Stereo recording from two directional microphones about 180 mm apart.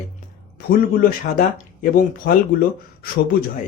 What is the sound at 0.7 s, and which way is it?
Speech, 55° left (ahead or behind).